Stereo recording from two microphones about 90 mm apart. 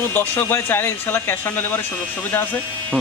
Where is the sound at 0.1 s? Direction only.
25° left (ahead or behind).